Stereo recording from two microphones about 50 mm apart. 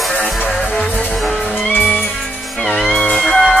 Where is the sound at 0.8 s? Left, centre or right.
Left.